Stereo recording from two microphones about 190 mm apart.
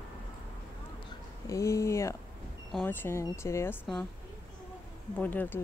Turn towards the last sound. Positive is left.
turn(degrees=10)  # may be behind; listen again after turning